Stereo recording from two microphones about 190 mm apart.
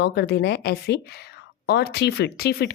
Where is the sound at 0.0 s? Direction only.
60° left (ahead or behind).